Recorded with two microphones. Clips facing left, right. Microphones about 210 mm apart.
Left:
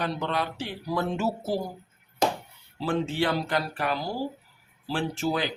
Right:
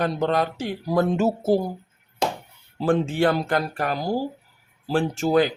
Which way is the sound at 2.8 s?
50° right (ahead or behind).